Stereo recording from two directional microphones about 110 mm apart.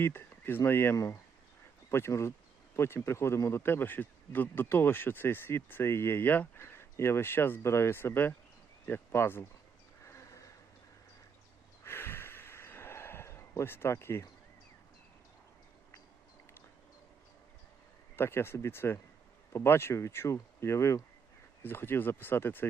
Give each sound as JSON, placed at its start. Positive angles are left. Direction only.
{"t": 0.0, "sound": "speech", "side_deg": 20}
{"t": 10.1, "sound": "a sound", "side_deg": 25}
{"t": 11.9, "sound": "snort", "side_deg": 20}
{"t": 18.2, "sound": "speech", "side_deg": 20}